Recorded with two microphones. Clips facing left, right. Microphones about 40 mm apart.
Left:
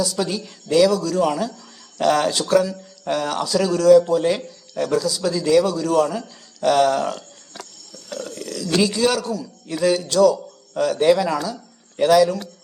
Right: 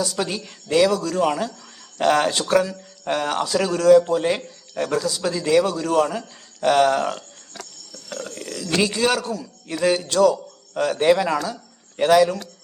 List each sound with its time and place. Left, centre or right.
0.0 s a man's voice: right